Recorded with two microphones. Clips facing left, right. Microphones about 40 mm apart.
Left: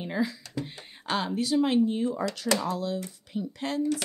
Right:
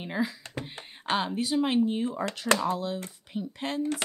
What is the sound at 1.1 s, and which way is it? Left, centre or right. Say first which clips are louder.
A woman's voice: left 1 dB; centre.